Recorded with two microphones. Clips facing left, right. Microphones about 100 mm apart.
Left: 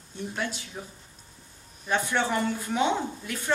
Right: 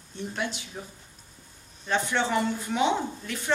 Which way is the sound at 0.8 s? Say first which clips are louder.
Even; 5° left (ahead or behind).